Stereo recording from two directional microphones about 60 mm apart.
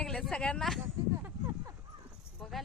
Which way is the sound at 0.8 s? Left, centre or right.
Right.